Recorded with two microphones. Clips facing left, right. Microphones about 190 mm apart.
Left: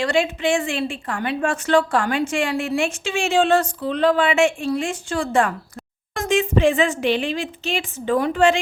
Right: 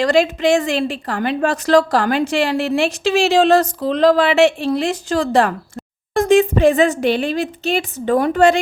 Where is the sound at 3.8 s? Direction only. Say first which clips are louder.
Right 5 dB; 90° right.